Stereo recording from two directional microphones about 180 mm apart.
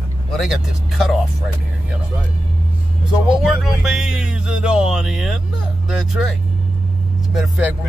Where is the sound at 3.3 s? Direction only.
Centre (ahead or behind).